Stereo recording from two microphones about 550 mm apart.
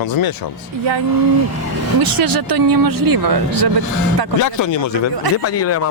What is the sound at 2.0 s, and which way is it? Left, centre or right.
Speech, right.